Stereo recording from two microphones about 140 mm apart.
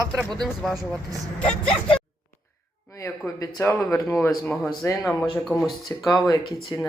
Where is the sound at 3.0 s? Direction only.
20° left (ahead or behind).